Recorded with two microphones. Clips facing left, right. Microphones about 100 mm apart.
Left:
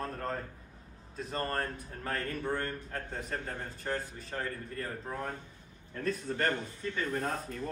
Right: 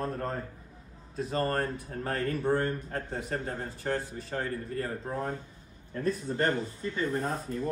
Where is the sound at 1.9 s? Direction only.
35° right (ahead or behind).